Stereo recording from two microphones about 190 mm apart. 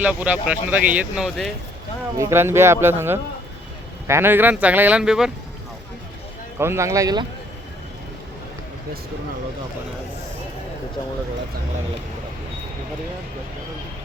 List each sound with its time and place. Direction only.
0.0 s speech: 5° right (ahead or behind)
2.1 s speech: 15° right (ahead or behind)
6.6 s speech: 15° right (ahead or behind)